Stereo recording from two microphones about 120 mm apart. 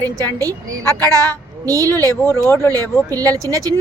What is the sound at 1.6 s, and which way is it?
Speech, 30° right (ahead or behind).